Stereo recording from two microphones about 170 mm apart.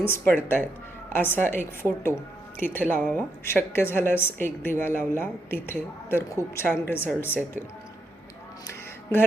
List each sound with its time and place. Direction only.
0.0 s speech: 15° left (ahead or behind)